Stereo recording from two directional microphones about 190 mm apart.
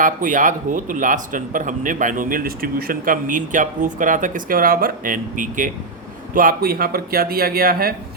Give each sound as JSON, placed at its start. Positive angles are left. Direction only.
{"t": 0.0, "sound": "speech", "side_deg": -45}